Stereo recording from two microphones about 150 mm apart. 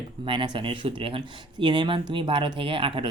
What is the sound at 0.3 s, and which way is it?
Speech, 35° right (ahead or behind).